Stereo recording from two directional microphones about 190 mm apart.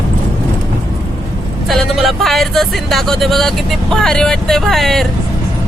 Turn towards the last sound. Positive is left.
turn(degrees=0)  # may be behind; listen again after turning